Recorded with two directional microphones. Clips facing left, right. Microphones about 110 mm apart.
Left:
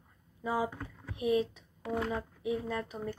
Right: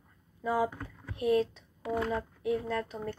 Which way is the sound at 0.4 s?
15° left (ahead or behind).